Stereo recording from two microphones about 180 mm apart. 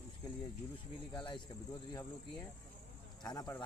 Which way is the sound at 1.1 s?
25° left (ahead or behind).